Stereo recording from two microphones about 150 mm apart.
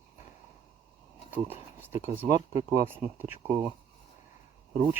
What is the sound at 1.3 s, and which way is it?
Speech, 15° right (ahead or behind).